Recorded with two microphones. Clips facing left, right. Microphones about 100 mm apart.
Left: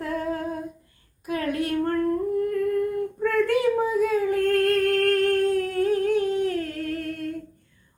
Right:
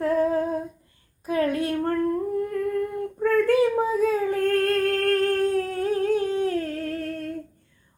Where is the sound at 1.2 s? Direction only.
30° right (ahead or behind).